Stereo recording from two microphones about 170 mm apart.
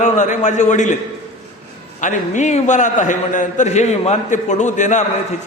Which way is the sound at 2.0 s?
45° left (ahead or behind).